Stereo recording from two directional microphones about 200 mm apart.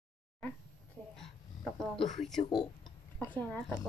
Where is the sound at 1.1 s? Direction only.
Centre (ahead or behind).